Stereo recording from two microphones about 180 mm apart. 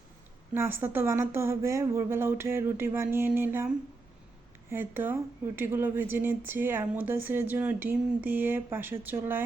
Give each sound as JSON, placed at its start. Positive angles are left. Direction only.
{"t": 0.5, "sound": "speech", "side_deg": -15}
{"t": 4.7, "sound": "speech", "side_deg": -10}